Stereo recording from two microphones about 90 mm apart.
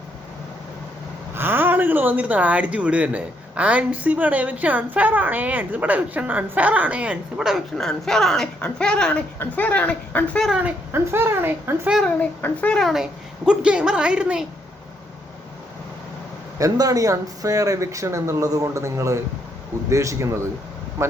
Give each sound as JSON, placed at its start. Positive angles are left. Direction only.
{"t": 1.4, "sound": "speech", "side_deg": -25}
{"t": 7.8, "sound": "speech", "side_deg": 5}
{"t": 10.6, "sound": "speech", "side_deg": -25}
{"t": 12.0, "sound": "speech", "side_deg": 15}
{"t": 12.8, "sound": "speech", "side_deg": -5}
{"t": 16.6, "sound": "speech", "side_deg": -40}